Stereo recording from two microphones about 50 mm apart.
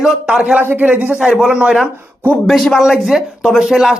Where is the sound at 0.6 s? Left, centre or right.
Right.